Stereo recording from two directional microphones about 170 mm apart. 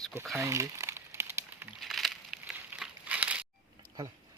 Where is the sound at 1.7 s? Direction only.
Centre (ahead or behind).